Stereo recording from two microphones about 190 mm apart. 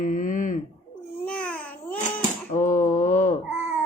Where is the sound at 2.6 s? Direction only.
40° left (ahead or behind).